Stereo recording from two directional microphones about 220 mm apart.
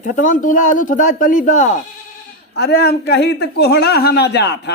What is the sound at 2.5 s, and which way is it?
Speech, 50° left (ahead or behind).